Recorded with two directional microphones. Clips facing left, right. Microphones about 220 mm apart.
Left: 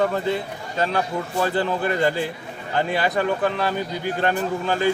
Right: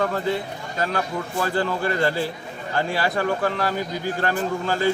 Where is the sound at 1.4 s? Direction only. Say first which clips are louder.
Left 1 dB; 20° left (ahead or behind).